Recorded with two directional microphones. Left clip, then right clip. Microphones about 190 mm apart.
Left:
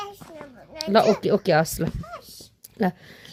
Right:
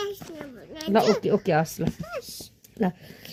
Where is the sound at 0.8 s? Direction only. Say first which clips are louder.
Left 3 dB; 35° left (ahead or behind).